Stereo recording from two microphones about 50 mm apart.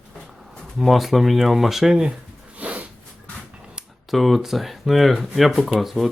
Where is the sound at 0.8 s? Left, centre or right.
Centre.